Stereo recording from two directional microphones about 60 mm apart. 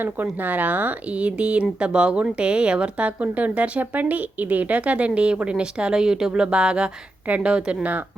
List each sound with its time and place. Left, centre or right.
0.0 s a woman's voice: right